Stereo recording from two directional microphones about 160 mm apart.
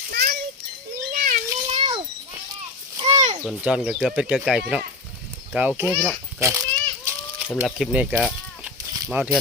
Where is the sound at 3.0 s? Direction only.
35° right (ahead or behind).